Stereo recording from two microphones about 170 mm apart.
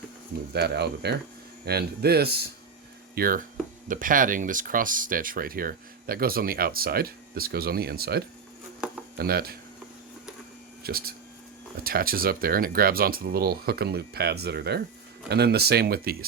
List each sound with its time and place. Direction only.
0.5 s speech: 75° right (ahead or behind)
3.2 s speech: 55° right (ahead or behind)
10.8 s speech: 60° right (ahead or behind)